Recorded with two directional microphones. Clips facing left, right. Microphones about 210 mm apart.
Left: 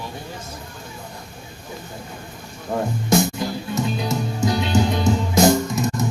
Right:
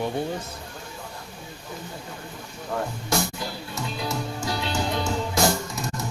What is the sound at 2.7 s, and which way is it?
Speech, 20° left (ahead or behind).